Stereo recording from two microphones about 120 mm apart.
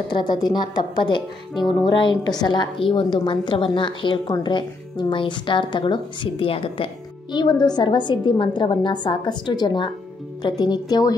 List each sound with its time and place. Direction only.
0.1 s a woman's voice: 35° left (ahead or behind)
7.3 s a woman's voice: 35° left (ahead or behind)